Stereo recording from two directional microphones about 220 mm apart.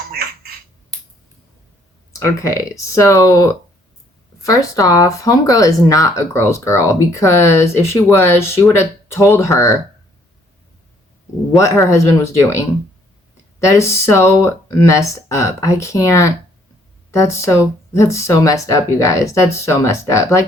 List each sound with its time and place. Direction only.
0.1 s a sound: 45° right (ahead or behind)
2.1 s speech: 15° left (ahead or behind)
11.5 s speech: 15° left (ahead or behind)
13.7 s speech: 15° left (ahead or behind)